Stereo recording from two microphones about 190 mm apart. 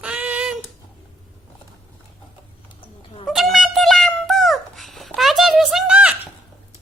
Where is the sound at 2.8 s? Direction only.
30° left (ahead or behind).